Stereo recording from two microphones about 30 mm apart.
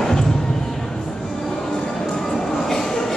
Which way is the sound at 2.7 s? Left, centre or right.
Centre.